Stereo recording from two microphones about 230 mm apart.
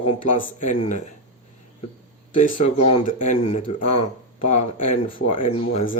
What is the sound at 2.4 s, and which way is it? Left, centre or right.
Speech, left.